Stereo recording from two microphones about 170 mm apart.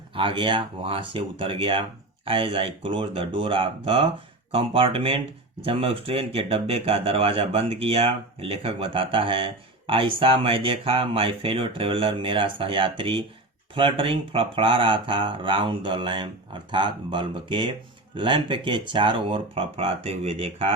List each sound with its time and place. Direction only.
0.1 s speech: 30° right (ahead or behind)